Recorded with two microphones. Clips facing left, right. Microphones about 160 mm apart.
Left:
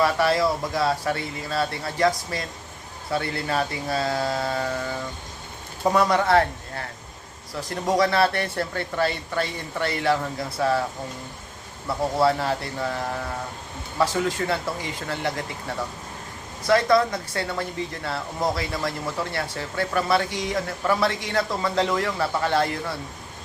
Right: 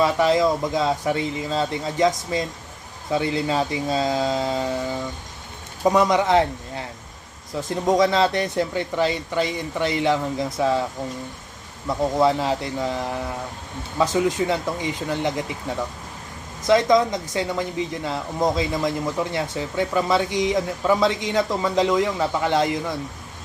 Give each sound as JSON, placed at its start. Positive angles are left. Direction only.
{"t": 0.0, "sound": "speech", "side_deg": -15}
{"t": 7.9, "sound": "speech", "side_deg": -20}
{"t": 11.9, "sound": "speech", "side_deg": -15}
{"t": 14.0, "sound": "speech", "side_deg": -20}